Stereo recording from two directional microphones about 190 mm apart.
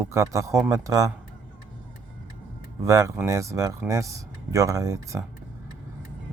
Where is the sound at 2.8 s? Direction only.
15° right (ahead or behind).